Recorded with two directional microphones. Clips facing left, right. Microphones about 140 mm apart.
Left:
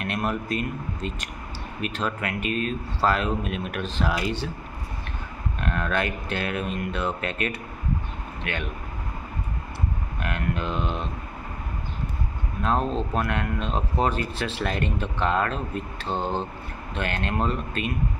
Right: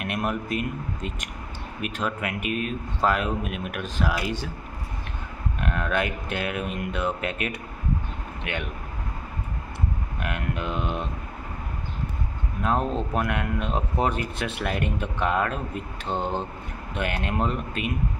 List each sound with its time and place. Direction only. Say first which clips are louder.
0.0 s speech: even; 15° right (ahead or behind)
5.6 s speech: even; 15° right (ahead or behind)
10.2 s speech: left 1 dB; 15° right (ahead or behind)
12.6 s speech: even; 15° right (ahead or behind)